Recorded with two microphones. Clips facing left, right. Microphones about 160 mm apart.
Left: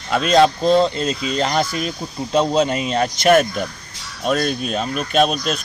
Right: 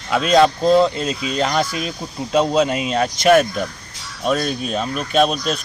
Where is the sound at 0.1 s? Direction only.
5° right (ahead or behind).